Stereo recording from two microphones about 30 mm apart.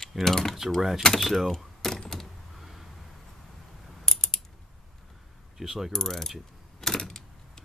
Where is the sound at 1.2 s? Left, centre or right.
Centre.